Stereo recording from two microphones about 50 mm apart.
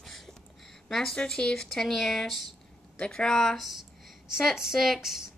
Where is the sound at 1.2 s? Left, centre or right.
Centre.